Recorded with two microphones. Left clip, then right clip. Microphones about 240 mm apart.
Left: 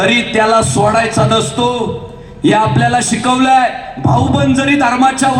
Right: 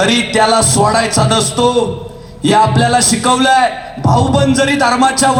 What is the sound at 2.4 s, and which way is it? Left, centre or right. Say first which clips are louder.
Speech: right 1 dB; right.